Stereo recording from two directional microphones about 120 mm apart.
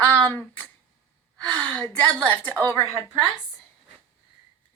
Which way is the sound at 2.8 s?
25° left (ahead or behind).